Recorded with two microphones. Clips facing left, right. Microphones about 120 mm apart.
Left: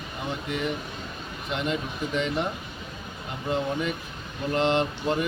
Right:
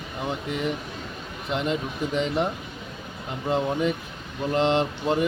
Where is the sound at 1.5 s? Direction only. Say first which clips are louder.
Right 2 dB; 30° right (ahead or behind).